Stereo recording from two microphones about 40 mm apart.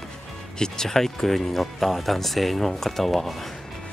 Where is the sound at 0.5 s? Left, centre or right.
Centre.